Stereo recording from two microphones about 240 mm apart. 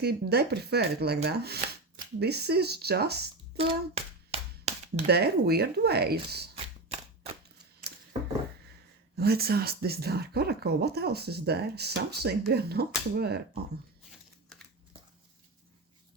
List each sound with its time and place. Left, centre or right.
0.0 s speech: right
3.6 s hands: right
3.9 s clapping: right
5.0 s speech: right
9.1 s speech: right